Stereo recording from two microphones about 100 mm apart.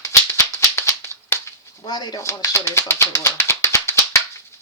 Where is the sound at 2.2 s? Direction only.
30° left (ahead or behind).